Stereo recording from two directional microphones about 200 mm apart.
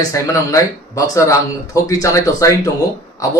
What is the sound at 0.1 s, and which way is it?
Speech, 15° left (ahead or behind).